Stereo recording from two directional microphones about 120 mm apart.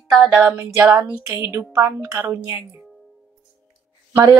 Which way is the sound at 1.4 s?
20° right (ahead or behind).